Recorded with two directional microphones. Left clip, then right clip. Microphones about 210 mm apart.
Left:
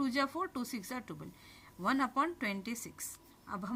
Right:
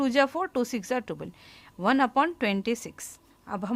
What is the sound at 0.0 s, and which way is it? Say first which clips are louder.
Speech: right 10 dB; 45° right (ahead or behind).